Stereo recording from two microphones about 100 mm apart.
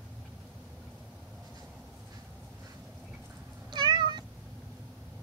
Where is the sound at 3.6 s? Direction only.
50° right (ahead or behind).